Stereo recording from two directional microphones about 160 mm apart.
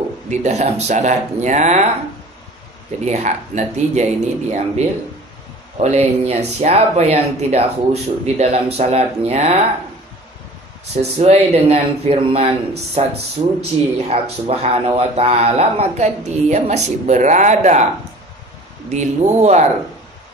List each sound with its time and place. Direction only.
0.3 s a man's voice: 45° right (ahead or behind)
3.1 s a man's voice: 45° right (ahead or behind)
11.0 s a man's voice: 40° right (ahead or behind)
18.9 s a man's voice: 45° right (ahead or behind)